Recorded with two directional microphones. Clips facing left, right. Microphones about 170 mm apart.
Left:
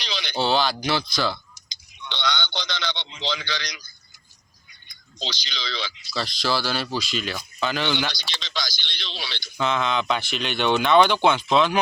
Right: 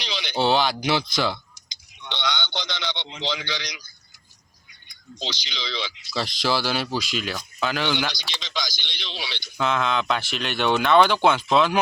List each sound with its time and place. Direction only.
0.1 s speech: 15° right (ahead or behind)
5.2 s speech: 20° right (ahead or behind); by 11.8 s 5° right (ahead or behind)